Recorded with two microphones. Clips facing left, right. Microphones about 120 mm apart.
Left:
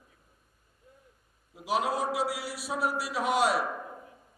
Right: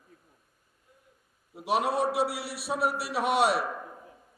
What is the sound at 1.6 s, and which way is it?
A man's voice, 65° right (ahead or behind).